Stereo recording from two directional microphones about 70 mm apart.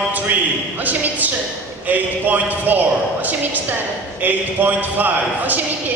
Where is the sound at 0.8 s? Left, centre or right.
Right.